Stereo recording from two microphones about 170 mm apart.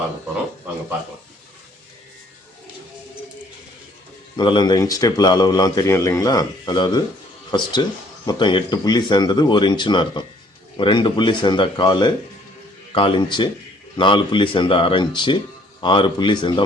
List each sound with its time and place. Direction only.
4.4 s speech: 25° left (ahead or behind)